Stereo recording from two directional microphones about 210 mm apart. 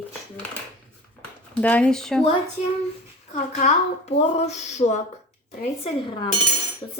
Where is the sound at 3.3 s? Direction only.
30° left (ahead or behind).